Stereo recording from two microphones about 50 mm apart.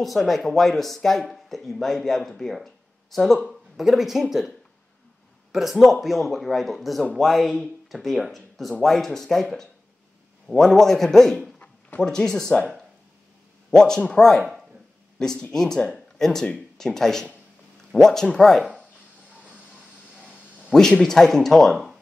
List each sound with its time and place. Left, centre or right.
0.0 s speech: centre
5.5 s speech: centre
13.7 s speech: centre
20.7 s speech: centre